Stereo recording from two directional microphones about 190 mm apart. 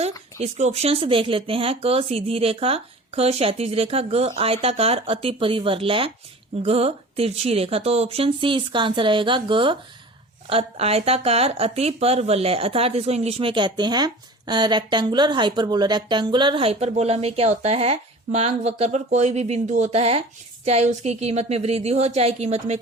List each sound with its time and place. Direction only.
0.3 s speech: 35° right (ahead or behind)